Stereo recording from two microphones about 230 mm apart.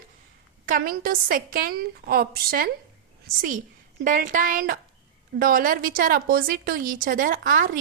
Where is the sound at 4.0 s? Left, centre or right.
Right.